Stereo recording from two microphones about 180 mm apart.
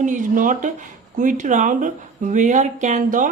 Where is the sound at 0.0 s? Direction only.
45° right (ahead or behind).